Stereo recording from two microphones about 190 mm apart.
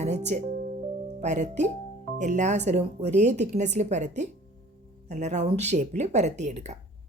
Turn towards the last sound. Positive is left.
turn(degrees=-35)  # may be behind; listen again after turning